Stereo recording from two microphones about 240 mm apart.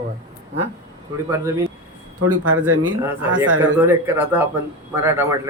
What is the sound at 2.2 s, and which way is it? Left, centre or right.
Speech, right.